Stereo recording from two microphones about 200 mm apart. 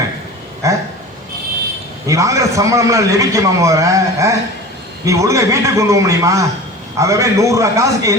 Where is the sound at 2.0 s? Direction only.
15° right (ahead or behind).